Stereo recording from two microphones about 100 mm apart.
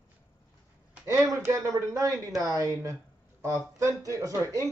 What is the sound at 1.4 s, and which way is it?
Speech, 30° right (ahead or behind).